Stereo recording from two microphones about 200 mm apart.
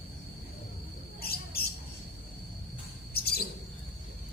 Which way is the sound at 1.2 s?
50° left (ahead or behind).